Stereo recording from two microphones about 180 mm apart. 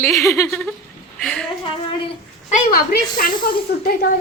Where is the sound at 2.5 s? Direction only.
55° left (ahead or behind).